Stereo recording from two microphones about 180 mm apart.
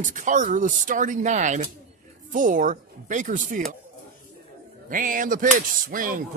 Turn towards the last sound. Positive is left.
turn(degrees=-50)  # may be behind; listen again after turning